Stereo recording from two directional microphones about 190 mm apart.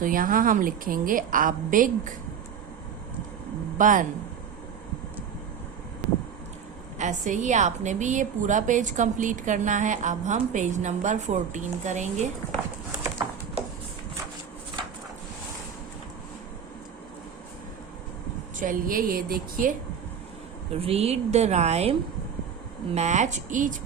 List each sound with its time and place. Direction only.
0.0 s a woman's voice: 45° right (ahead or behind)
3.8 s a woman's voice: 45° right (ahead or behind)
7.0 s a woman's voice: 40° right (ahead or behind)
18.5 s a woman's voice: 45° right (ahead or behind)
20.7 s a woman's voice: 30° right (ahead or behind)